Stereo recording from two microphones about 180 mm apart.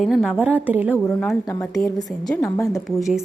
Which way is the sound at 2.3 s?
20° left (ahead or behind).